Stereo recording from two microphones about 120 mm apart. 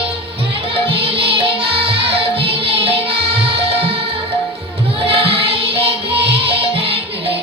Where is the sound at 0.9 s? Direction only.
50° right (ahead or behind).